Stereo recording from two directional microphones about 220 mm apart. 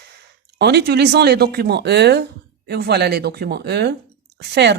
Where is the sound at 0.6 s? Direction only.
50° right (ahead or behind).